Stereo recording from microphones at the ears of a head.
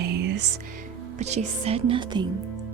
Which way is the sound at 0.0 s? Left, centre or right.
Right.